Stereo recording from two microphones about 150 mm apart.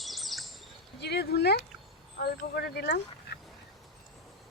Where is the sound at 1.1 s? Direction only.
90° left.